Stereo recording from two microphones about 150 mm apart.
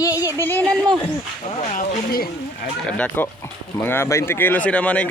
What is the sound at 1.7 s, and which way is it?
Speech, 80° left.